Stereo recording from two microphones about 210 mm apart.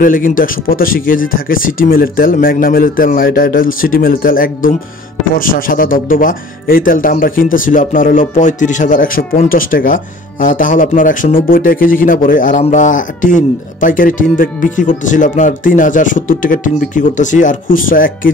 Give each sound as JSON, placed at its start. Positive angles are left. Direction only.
{"t": 0.0, "sound": "speech", "side_deg": 40}